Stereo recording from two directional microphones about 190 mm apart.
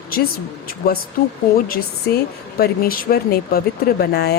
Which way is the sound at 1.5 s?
50° left (ahead or behind).